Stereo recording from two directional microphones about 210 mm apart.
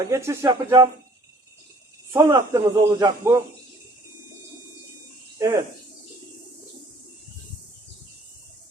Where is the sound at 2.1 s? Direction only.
15° right (ahead or behind).